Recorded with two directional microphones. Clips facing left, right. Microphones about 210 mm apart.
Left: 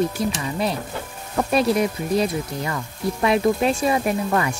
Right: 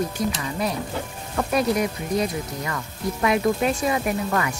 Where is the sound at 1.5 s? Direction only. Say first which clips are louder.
Left 3 dB; 30° left (ahead or behind).